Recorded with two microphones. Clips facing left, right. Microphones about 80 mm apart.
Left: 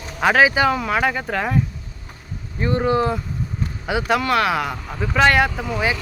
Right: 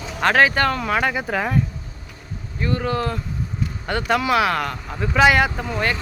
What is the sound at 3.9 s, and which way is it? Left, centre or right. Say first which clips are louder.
Speech: left 1 dB; centre.